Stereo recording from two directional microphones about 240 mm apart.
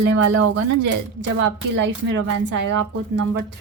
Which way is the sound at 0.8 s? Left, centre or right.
Right.